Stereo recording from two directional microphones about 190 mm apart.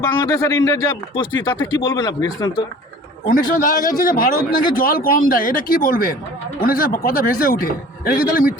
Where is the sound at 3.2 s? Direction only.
45° left (ahead or behind).